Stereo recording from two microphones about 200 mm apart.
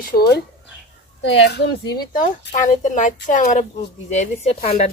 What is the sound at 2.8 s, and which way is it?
Speech, 40° left (ahead or behind).